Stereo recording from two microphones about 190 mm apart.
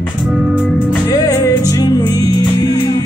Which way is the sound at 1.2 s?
15° left (ahead or behind).